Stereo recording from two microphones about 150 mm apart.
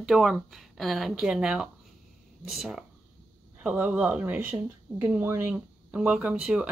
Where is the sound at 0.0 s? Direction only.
Centre (ahead or behind).